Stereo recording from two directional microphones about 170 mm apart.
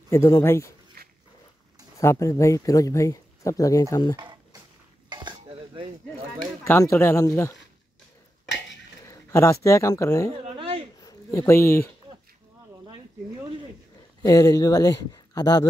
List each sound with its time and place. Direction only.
0.1 s speech: 15° left (ahead or behind)
1.0 s dog: 65° right (ahead or behind)
2.0 s speech: 20° left (ahead or behind)
4.2 s a sound: 25° right (ahead or behind)
5.1 s cutlery: 25° right (ahead or behind)
6.6 s speech: 15° left (ahead or behind)
9.0 s speech: 15° left (ahead or behind)
10.4 s a sound: 35° right (ahead or behind)
11.0 s a sound: 20° left (ahead or behind)
14.2 s speech: 20° left (ahead or behind)